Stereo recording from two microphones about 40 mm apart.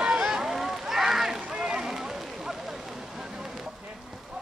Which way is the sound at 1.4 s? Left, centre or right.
Right.